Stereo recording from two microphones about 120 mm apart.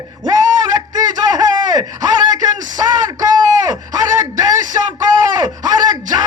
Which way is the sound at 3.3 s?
35° right (ahead or behind).